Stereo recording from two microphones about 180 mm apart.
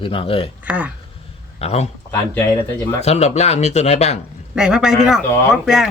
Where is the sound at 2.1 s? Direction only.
10° left (ahead or behind).